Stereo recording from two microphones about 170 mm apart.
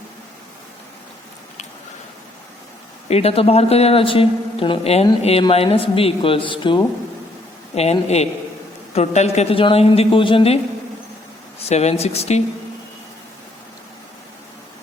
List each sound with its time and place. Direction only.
3.1 s a man's voice: 35° left (ahead or behind)
7.8 s a man's voice: 40° left (ahead or behind)
11.7 s a man's voice: 40° left (ahead or behind)